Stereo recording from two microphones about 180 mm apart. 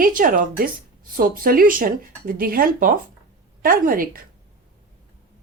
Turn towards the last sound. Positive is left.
turn(degrees=-55)  # may be behind; listen again after turning